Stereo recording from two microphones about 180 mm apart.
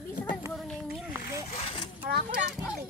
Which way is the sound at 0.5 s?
Centre (ahead or behind).